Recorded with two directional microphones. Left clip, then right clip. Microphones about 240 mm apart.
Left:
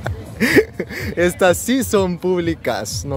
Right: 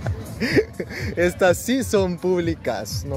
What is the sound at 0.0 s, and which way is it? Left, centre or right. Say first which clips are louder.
Speech: left 7 dB; left.